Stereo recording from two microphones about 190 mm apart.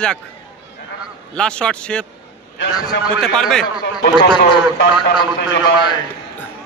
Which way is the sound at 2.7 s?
20° left (ahead or behind).